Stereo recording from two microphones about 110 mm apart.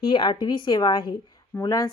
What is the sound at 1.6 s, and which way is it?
Speech, 30° left (ahead or behind).